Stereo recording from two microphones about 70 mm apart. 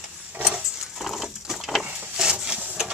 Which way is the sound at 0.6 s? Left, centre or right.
Centre.